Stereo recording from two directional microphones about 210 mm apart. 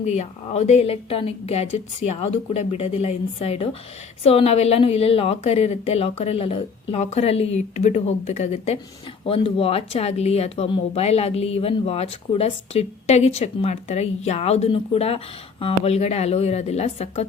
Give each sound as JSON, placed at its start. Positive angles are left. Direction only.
{"t": 0.0, "sound": "a woman's voice", "side_deg": 30}